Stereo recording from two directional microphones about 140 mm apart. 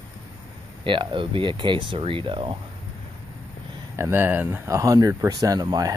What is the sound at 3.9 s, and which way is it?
Speech, 15° right (ahead or behind).